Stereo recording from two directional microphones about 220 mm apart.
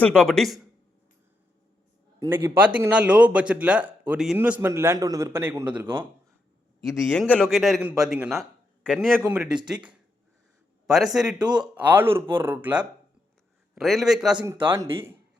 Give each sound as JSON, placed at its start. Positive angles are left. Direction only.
{"t": 0.0, "sound": "a man's voice", "side_deg": 5}
{"t": 2.1, "sound": "a man's voice", "side_deg": -15}
{"t": 14.3, "sound": "a man's voice", "side_deg": -20}